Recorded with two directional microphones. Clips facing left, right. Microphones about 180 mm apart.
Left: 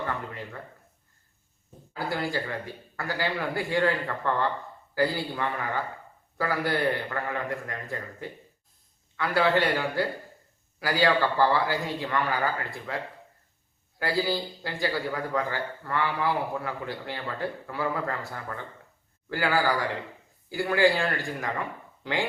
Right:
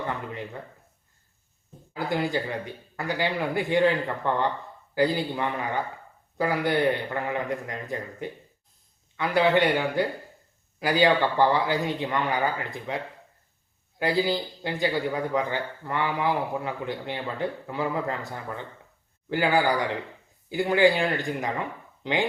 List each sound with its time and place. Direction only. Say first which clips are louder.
0.0 s a sound: right 1 dB; 20° right (ahead or behind)
1.9 s a man's voice: right 3 dB; 20° right (ahead or behind)
14.0 s a man's voice: right 3 dB; 20° right (ahead or behind)